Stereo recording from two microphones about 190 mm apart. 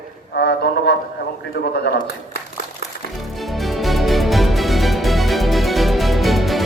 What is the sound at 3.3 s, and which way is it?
Music, centre (ahead or behind).